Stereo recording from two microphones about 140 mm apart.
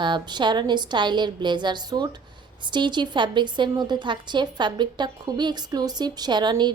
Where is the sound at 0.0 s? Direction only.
35° right (ahead or behind).